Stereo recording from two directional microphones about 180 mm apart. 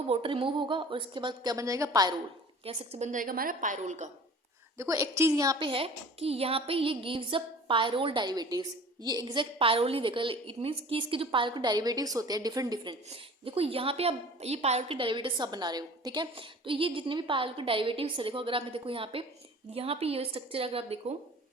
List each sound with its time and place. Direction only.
0.1 s a woman's voice: 30° right (ahead or behind)
2.6 s a woman's voice: 40° right (ahead or behind)
4.8 s a woman's voice: 15° right (ahead or behind); by 21.0 s 30° right (ahead or behind)